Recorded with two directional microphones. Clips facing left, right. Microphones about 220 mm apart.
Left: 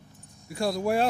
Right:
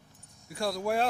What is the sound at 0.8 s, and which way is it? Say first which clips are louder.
Speech: left 4 dB; 10° left (ahead or behind).